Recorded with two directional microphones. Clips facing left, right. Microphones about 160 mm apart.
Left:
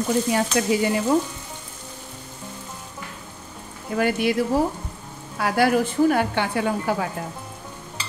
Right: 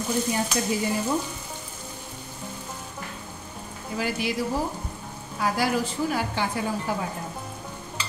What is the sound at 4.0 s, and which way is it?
Speech, 55° left (ahead or behind).